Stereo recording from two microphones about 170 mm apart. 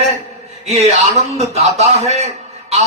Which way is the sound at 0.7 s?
40° right (ahead or behind).